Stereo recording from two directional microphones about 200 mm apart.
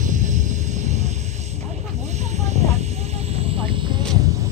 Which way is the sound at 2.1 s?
35° right (ahead or behind).